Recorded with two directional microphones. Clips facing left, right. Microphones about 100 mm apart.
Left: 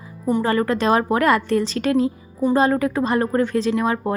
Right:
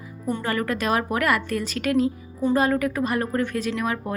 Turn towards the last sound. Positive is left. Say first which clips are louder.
# left 6 dB
turn(degrees=30)  # may be behind; listen again after turning